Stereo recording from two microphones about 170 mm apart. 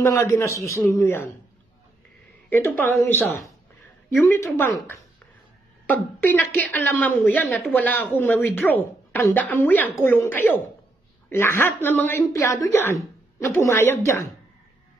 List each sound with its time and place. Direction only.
0.0 s a woman's voice: 15° left (ahead or behind)
2.5 s a woman's voice: 10° left (ahead or behind)
5.9 s a woman's voice: 10° left (ahead or behind)